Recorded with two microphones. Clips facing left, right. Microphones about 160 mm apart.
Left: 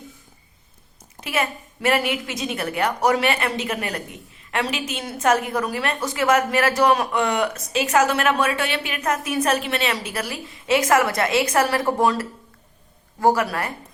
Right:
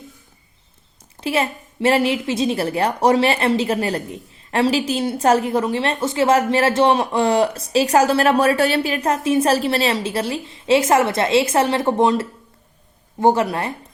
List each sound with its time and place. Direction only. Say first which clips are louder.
1.2 s a woman's voice: right 4 dB; 30° right (ahead or behind)